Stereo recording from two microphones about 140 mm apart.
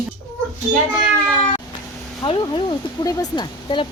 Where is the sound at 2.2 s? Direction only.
30° left (ahead or behind).